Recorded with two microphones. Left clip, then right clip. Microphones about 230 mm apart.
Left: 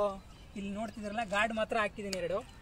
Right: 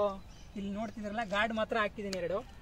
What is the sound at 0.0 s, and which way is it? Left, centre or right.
Speech, centre.